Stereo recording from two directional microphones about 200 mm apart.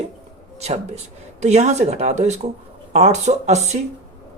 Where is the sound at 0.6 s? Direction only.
35° right (ahead or behind).